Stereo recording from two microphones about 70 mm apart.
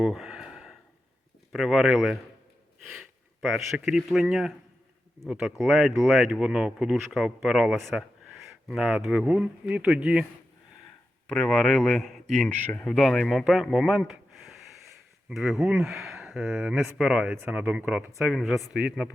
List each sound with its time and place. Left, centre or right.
0.0 s a sound: centre
1.5 s speech: centre
3.4 s speech: centre
5.3 s speech: centre
11.3 s speech: centre
15.7 s speech: right
16.0 s speech: centre
18.2 s speech: centre